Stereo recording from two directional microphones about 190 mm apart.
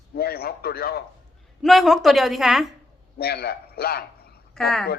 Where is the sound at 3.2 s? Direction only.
55° left (ahead or behind).